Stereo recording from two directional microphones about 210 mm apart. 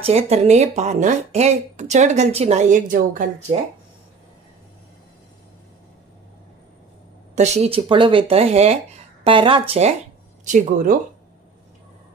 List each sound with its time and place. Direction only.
0.0 s speech: 30° right (ahead or behind)
7.3 s speech: 30° right (ahead or behind)